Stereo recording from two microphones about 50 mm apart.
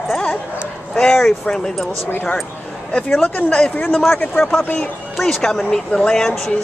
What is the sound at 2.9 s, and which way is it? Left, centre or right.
Speech, centre.